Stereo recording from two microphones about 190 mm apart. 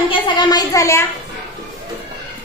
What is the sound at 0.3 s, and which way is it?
Speech, 20° left (ahead or behind).